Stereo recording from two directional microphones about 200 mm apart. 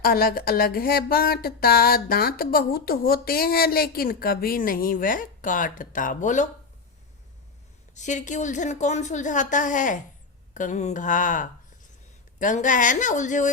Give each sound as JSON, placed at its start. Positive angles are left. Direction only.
{"t": 0.0, "sound": "speech", "side_deg": 50}
{"t": 7.9, "sound": "a woman's voice", "side_deg": 35}